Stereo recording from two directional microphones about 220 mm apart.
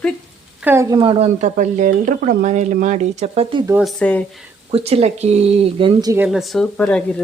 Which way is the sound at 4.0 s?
5° left (ahead or behind).